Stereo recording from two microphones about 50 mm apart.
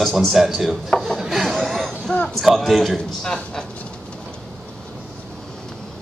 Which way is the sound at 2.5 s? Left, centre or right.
Centre.